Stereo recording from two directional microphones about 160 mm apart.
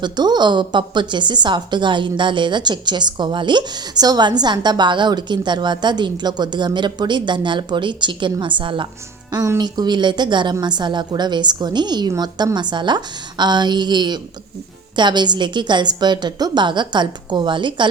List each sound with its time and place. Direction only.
0.0 s speech: 25° right (ahead or behind)
9.3 s speech: 20° right (ahead or behind)